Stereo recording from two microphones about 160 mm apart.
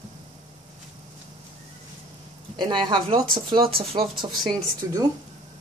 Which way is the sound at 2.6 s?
30° right (ahead or behind).